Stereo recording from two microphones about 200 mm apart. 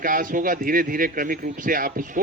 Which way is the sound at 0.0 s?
40° right (ahead or behind).